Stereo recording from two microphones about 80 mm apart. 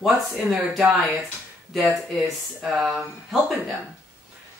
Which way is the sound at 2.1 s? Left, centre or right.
Centre.